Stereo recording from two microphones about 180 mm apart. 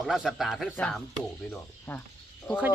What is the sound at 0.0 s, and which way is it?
A man's voice, centre (ahead or behind).